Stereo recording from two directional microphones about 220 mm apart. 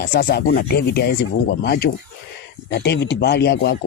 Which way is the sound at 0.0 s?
45° left (ahead or behind).